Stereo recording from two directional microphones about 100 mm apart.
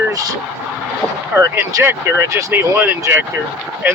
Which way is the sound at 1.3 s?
25° right (ahead or behind).